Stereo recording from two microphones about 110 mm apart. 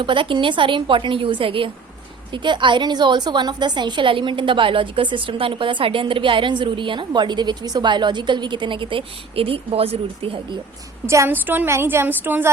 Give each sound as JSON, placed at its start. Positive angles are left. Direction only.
{"t": 0.0, "sound": "a woman's voice", "side_deg": -50}
{"t": 11.0, "sound": "a woman's voice", "side_deg": -25}